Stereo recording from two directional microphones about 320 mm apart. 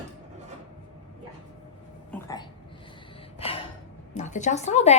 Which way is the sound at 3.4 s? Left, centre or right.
Centre.